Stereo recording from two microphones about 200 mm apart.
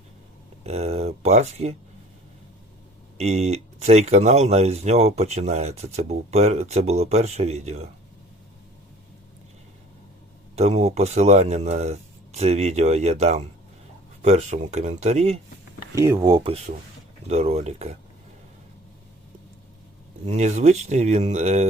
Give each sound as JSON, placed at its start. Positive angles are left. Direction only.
{"t": 0.6, "sound": "speech", "side_deg": -30}
{"t": 3.2, "sound": "speech", "side_deg": -30}
{"t": 10.5, "sound": "speech", "side_deg": -30}
{"t": 16.0, "sound": "speech", "side_deg": -20}
{"t": 20.2, "sound": "speech", "side_deg": -35}